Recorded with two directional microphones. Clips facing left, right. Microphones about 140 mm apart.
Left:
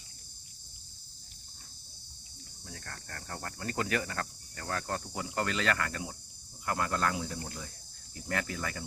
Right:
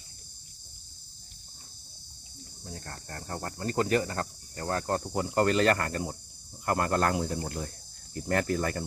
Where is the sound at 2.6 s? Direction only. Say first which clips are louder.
Right 4 dB; 30° right (ahead or behind); by 8.9 s 45° right (ahead or behind).